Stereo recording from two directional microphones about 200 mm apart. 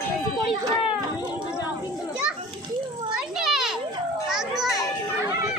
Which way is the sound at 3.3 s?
Centre (ahead or behind).